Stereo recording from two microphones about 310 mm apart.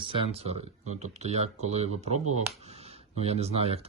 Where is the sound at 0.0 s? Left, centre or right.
Centre.